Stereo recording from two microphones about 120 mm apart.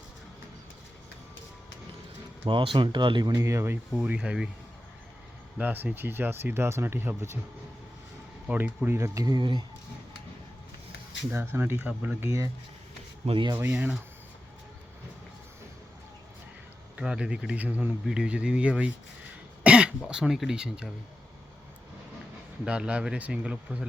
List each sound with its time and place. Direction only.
2.4 s speech: 45° right (ahead or behind)
3.3 s speech: 25° right (ahead or behind)
3.9 s speech: 10° right (ahead or behind)
5.5 s speech: 15° right (ahead or behind)
8.4 s speech: 15° right (ahead or behind); by 9.6 s 35° right (ahead or behind)
11.3 s speech: 20° right (ahead or behind)
13.2 s speech: 50° right (ahead or behind)
13.6 s speech: 15° right (ahead or behind)
17.0 s speech: 5° right (ahead or behind)
19.6 s cough: 10° right (ahead or behind)
20.1 s speech: 5° right (ahead or behind)
22.6 s speech: 10° right (ahead or behind)